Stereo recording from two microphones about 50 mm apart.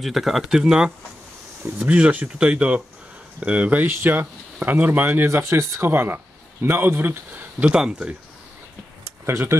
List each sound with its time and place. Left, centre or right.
0.0 s speech: centre
1.8 s speech: right
3.8 s speech: right
5.4 s speech: right
5.9 s speech: right
7.6 s speech: centre
9.0 s a sound: right